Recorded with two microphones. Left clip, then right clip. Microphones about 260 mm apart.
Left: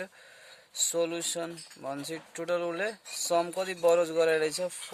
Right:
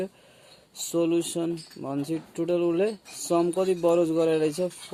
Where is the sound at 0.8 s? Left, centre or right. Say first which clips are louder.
Right 2 dB; left.